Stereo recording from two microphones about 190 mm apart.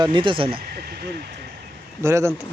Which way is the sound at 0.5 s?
55° right (ahead or behind).